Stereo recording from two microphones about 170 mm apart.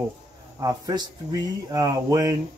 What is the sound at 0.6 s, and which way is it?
Speech, 20° right (ahead or behind).